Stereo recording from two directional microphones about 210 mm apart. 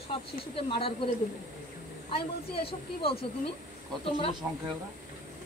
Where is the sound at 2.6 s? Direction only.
25° left (ahead or behind).